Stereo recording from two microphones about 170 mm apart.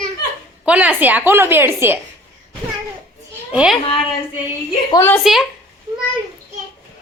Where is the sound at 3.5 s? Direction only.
5° right (ahead or behind).